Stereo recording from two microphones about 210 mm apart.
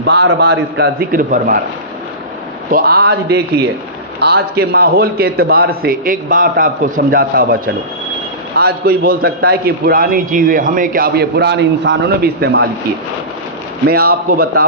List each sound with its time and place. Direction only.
0.0 s a man's voice: 55° right (ahead or behind)
2.7 s a man's voice: 45° right (ahead or behind)
8.5 s a man's voice: 45° right (ahead or behind)
13.8 s a man's voice: 50° right (ahead or behind)